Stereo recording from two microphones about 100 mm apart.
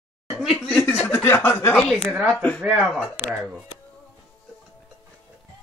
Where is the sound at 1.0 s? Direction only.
25° left (ahead or behind).